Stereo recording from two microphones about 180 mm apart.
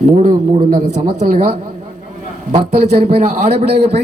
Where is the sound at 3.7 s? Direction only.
65° right (ahead or behind).